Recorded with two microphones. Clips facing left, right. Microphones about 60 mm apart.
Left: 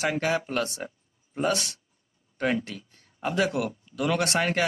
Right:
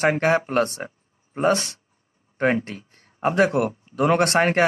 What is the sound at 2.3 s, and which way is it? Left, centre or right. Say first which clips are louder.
Speech: right 5 dB; right.